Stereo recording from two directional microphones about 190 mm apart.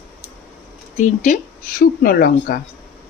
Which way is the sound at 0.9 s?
40° left (ahead or behind).